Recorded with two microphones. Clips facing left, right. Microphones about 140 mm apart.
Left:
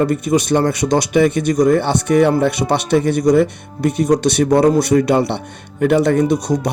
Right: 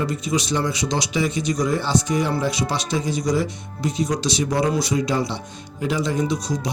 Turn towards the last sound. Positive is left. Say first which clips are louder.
# left 8 dB
turn(degrees=60)  # may be behind; listen again after turning